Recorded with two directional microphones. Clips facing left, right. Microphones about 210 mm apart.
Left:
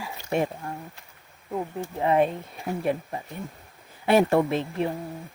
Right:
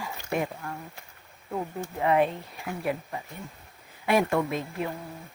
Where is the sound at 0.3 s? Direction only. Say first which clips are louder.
Left 4 dB; 30° left (ahead or behind).